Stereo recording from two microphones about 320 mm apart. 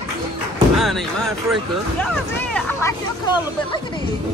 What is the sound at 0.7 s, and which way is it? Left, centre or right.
Speech, centre.